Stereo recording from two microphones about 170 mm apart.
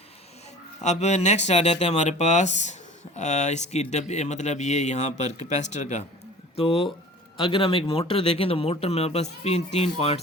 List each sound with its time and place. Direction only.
0.8 s speech: 40° left (ahead or behind)